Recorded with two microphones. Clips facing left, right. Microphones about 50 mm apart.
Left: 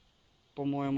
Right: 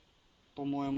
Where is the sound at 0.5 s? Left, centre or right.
Centre.